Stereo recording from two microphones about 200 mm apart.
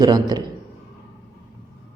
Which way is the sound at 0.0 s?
20° right (ahead or behind).